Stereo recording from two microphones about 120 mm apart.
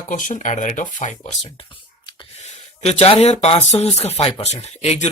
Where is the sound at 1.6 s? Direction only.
40° left (ahead or behind).